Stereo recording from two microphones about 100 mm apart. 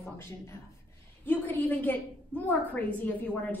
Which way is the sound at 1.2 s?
20° left (ahead or behind).